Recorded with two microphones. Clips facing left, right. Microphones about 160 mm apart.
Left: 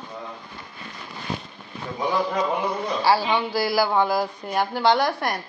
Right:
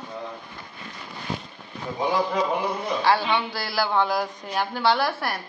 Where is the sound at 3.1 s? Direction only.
10° left (ahead or behind).